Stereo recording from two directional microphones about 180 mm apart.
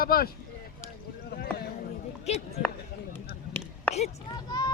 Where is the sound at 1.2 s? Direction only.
60° left (ahead or behind).